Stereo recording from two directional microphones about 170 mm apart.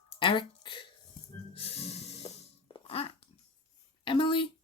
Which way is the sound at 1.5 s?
35° left (ahead or behind).